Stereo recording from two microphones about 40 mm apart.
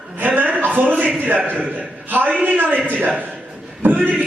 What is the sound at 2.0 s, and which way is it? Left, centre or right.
Speech, right.